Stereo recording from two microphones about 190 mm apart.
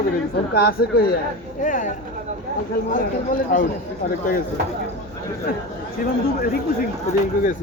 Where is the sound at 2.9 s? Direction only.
45° left (ahead or behind).